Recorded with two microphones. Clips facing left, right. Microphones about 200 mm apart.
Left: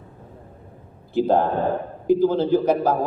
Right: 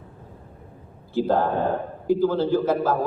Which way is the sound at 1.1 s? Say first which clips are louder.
Left 2 dB; 20° left (ahead or behind).